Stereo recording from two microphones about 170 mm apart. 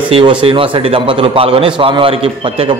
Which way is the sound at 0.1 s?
30° right (ahead or behind).